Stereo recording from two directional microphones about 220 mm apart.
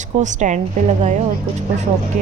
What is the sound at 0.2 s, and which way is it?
Speech, 35° right (ahead or behind).